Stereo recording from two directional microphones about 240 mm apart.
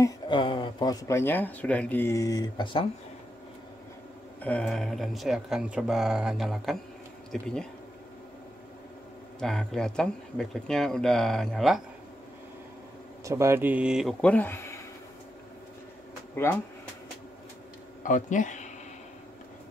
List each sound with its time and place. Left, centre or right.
0.0 s speech: centre
4.4 s speech: centre
9.4 s speech: centre
13.2 s speech: centre
16.5 s speech: centre
18.0 s speech: left